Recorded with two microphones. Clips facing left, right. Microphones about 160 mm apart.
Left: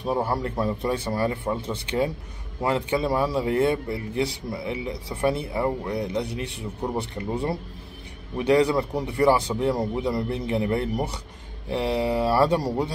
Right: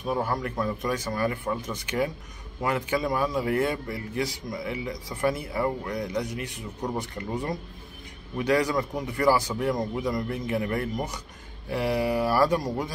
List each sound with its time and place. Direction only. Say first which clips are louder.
0.0 s a man's voice: left 3 dB; 30° left (ahead or behind)